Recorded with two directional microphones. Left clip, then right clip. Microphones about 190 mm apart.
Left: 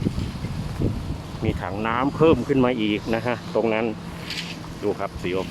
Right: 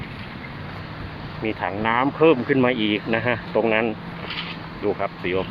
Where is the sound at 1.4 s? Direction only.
10° left (ahead or behind).